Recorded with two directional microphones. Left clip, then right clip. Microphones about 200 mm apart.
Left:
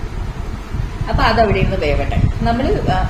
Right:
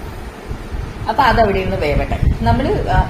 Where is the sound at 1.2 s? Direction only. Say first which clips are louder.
Left 2 dB; centre (ahead or behind).